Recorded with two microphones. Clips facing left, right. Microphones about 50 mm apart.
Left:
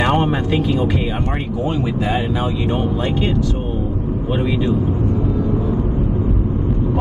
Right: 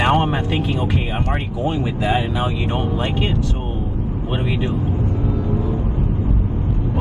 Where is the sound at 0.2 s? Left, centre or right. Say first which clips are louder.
Left 2 dB; right.